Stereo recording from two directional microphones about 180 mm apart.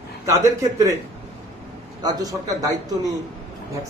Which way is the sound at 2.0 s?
20° right (ahead or behind).